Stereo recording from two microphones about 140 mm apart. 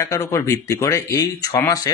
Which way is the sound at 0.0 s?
20° left (ahead or behind).